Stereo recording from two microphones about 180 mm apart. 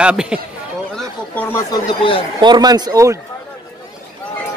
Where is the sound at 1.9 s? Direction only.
30° left (ahead or behind).